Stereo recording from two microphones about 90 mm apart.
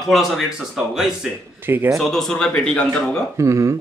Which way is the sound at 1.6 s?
25° right (ahead or behind).